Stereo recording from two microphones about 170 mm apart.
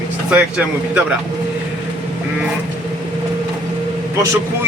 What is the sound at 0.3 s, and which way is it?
Speech, 5° right (ahead or behind).